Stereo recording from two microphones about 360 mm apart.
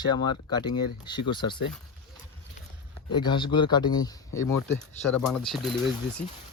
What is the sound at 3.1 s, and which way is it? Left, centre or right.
Speech, centre.